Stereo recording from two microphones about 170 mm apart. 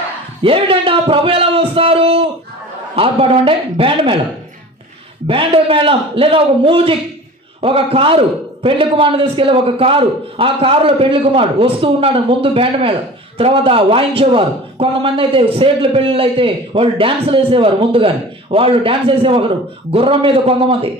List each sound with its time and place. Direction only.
0.4 s a man's voice: 30° right (ahead or behind)
5.2 s a man's voice: 30° right (ahead or behind)